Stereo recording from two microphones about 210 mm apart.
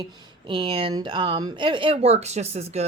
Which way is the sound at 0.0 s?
25° right (ahead or behind).